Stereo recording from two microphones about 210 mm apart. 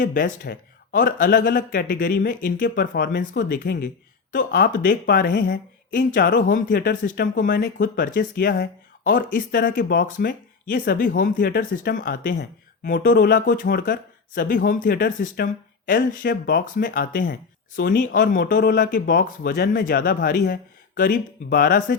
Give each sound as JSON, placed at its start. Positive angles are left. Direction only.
{"t": 0.0, "sound": "speech", "side_deg": 40}